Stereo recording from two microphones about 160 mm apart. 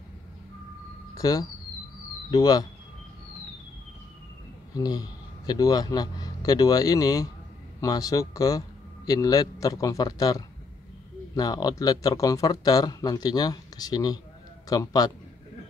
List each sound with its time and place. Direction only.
1.1 s a sound: 20° left (ahead or behind)
2.3 s speech: 25° left (ahead or behind)
4.7 s a man's voice: 25° left (ahead or behind)